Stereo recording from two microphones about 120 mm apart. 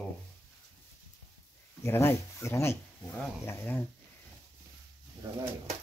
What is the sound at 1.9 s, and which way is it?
Speech, 20° left (ahead or behind).